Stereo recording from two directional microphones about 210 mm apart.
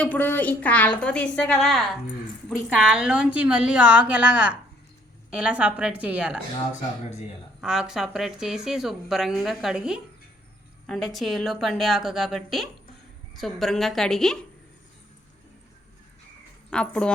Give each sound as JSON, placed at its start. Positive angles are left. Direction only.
{"t": 0.0, "sound": "a woman's voice", "side_deg": 10}
{"t": 7.6, "sound": "speech", "side_deg": -5}
{"t": 16.6, "sound": "a woman's voice", "side_deg": 5}